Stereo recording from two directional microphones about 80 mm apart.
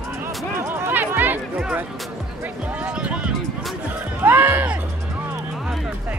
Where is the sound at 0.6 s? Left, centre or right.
Right.